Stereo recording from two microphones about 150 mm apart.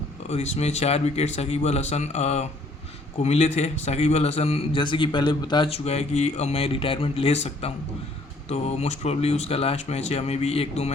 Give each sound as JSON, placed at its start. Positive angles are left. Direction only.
{"t": 0.3, "sound": "a man's voice", "side_deg": 50}